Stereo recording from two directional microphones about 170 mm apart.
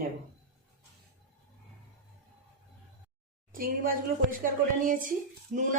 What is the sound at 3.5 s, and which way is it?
A woman's voice, 55° right (ahead or behind).